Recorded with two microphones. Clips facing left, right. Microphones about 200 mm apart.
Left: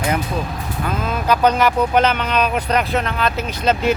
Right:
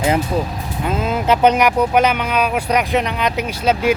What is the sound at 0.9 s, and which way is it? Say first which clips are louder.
Speech: right 3 dB; 25° right (ahead or behind).